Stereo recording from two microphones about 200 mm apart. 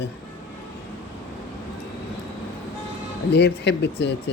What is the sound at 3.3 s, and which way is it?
Speech, 60° left (ahead or behind).